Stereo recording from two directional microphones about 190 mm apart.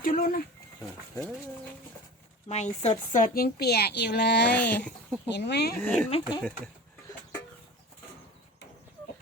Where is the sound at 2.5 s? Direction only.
35° left (ahead or behind); by 4.5 s 60° left (ahead or behind).